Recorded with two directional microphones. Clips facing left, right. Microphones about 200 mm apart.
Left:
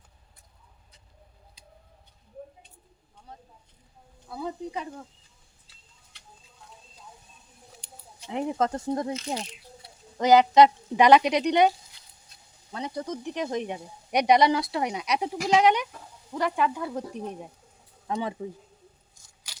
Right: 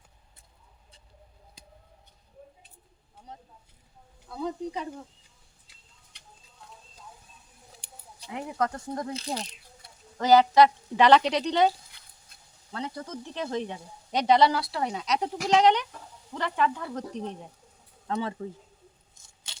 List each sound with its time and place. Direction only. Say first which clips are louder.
1.6 s tick-tock: right 1 dB; 45° right (ahead or behind)
3.3 s a sound: right 1 dB; 20° right (ahead or behind)
4.3 s speech: right 1 dB; 5° left (ahead or behind)
8.3 s speech: left 4 dB; 25° left (ahead or behind)
10.2 s speech: left 1 dB; 20° left (ahead or behind)
12.7 s speech: left 3 dB; 15° left (ahead or behind)
19.1 s a sound: right 1 dB; 25° right (ahead or behind)